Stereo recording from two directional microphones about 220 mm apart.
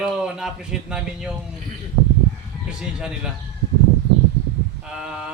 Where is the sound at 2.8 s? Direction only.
5° right (ahead or behind).